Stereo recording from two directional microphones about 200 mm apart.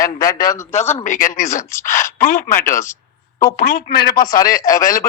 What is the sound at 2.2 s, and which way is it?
Speech, 40° left (ahead or behind).